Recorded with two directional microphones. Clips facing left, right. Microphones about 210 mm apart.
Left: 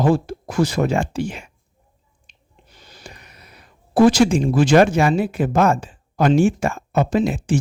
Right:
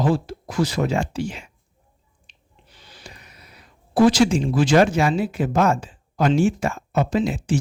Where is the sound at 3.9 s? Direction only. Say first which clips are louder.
Left 2 dB; 50° left (ahead or behind).